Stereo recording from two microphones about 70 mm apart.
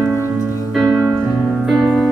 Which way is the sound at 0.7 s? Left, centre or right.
Centre.